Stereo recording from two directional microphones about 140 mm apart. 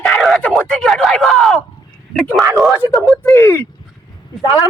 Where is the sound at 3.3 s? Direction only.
15° left (ahead or behind).